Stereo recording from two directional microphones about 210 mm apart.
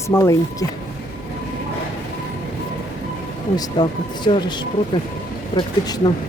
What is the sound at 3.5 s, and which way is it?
Speech, 20° left (ahead or behind).